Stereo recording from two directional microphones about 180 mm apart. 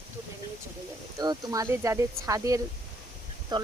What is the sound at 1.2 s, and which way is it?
Speech, 20° right (ahead or behind).